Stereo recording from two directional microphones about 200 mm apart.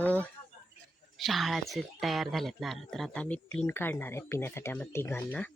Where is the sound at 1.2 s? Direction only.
Centre (ahead or behind).